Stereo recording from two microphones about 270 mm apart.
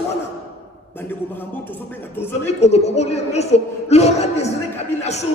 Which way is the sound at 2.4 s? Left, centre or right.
Left.